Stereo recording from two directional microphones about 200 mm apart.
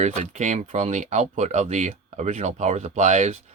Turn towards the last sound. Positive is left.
turn(degrees=-35)  # may be behind; listen again after turning